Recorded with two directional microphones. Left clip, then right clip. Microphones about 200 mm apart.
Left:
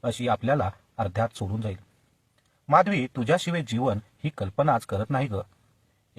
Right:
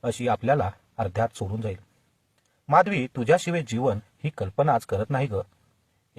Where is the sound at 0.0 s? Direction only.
30° right (ahead or behind).